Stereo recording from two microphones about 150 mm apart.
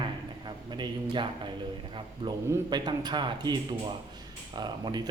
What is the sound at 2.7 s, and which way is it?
Speech, 30° right (ahead or behind).